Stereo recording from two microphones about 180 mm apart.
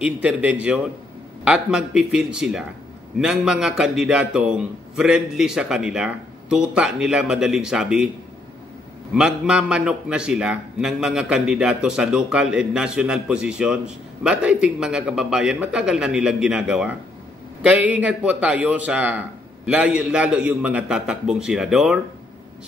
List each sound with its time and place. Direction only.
0.0 s a man's voice: 5° right (ahead or behind)
9.1 s a man's voice: 5° right (ahead or behind)